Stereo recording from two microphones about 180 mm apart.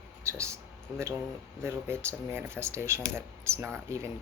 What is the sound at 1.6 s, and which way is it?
Speech, 15° right (ahead or behind).